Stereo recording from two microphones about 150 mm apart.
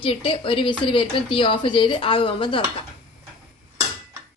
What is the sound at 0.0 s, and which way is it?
Speech, 40° left (ahead or behind).